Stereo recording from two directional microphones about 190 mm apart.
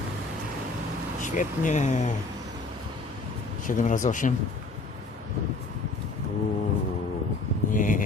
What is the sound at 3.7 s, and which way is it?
Speech, 40° left (ahead or behind).